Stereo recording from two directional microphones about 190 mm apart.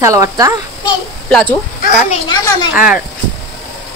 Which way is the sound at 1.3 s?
10° left (ahead or behind).